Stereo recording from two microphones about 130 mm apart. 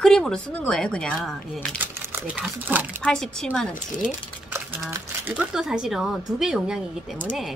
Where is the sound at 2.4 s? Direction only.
15° right (ahead or behind).